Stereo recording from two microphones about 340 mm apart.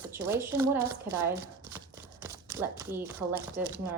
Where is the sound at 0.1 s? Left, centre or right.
Centre.